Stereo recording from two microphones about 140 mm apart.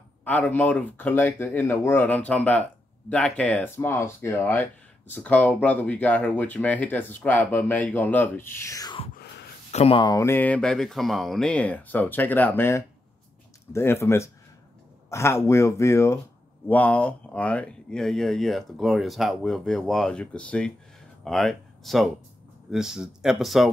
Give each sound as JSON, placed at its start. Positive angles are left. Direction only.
{"t": 0.2, "sound": "speech", "side_deg": 10}
{"t": 9.7, "sound": "speech", "side_deg": 50}
{"t": 10.0, "sound": "speech", "side_deg": 20}